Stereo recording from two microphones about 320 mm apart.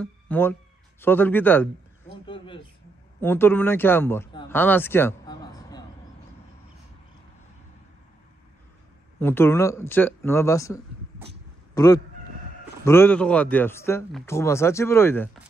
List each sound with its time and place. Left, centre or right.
0.0 s speech: centre
2.2 s a sound: centre
3.2 s speech: centre
9.2 s speech: centre